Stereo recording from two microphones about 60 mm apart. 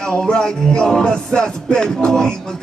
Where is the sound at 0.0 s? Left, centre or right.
Centre.